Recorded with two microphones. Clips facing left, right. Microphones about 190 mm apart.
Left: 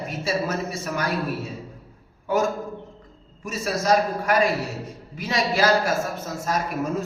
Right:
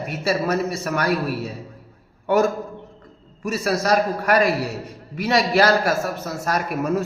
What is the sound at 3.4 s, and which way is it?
A man's voice, 70° right (ahead or behind).